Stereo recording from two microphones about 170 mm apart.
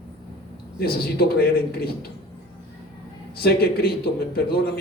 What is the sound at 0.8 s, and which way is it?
A man's voice, 65° left (ahead or behind).